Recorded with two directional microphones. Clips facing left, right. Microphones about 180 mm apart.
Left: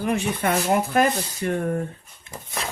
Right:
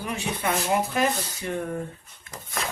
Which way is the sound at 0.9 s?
55° left (ahead or behind).